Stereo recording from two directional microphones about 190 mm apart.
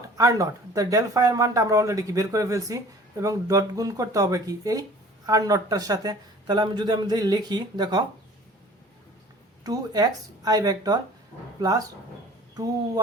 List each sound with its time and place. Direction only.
0.2 s speech: 15° right (ahead or behind)
9.6 s speech: 20° right (ahead or behind)